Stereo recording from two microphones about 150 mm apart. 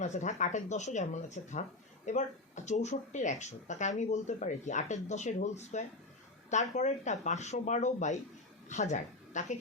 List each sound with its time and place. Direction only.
0.0 s a woman's voice: 55° left (ahead or behind)